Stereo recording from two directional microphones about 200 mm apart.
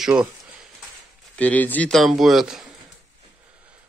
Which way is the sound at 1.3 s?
10° left (ahead or behind).